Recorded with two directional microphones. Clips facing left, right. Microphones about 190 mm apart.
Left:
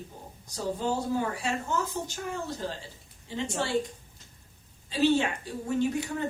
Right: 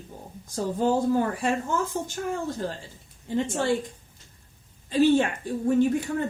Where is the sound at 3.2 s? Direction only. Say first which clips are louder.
Right 5 dB; 50° right (ahead or behind).